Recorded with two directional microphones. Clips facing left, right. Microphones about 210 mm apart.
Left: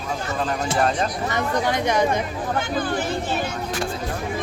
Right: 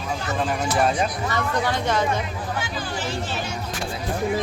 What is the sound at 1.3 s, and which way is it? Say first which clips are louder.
Speech: left 2 dB; 15° left (ahead or behind).